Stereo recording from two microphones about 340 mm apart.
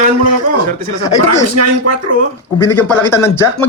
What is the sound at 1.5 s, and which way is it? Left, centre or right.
Speech, right.